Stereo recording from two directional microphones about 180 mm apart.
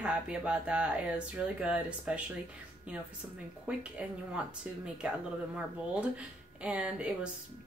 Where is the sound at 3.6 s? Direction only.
5° right (ahead or behind).